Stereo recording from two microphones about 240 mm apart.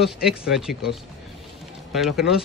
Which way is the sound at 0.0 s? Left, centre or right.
Centre.